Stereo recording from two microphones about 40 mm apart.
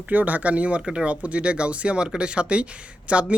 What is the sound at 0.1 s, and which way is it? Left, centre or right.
Speech, right.